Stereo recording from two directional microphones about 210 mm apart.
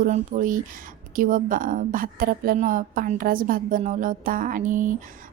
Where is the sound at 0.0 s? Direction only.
40° right (ahead or behind).